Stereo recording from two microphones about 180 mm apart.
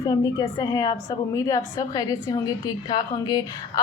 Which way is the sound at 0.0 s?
20° left (ahead or behind).